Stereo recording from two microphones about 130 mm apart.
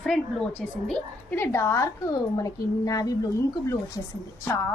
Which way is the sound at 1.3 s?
20° left (ahead or behind).